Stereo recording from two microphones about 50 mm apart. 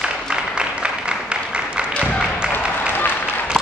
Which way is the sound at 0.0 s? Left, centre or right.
Centre.